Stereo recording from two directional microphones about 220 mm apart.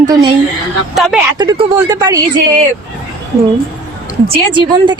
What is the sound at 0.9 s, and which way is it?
Speech, centre (ahead or behind).